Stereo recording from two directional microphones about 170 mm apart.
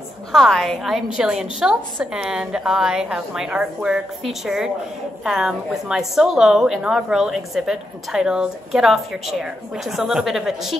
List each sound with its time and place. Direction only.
0.3 s a woman's voice: centre (ahead or behind)